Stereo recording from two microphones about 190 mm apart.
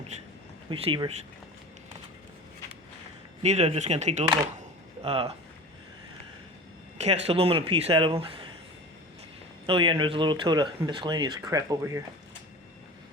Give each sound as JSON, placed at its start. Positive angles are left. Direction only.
{"t": 0.1, "sound": "speech", "side_deg": -35}
{"t": 0.7, "sound": "speech", "side_deg": -25}
{"t": 3.4, "sound": "speech", "side_deg": -35}
{"t": 7.0, "sound": "speech", "side_deg": -30}
{"t": 9.6, "sound": "speech", "side_deg": -25}